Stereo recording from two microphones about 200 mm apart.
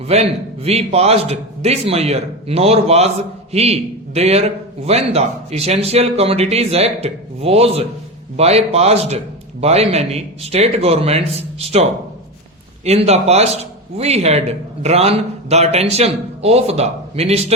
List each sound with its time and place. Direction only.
0.1 s speech: 30° right (ahead or behind)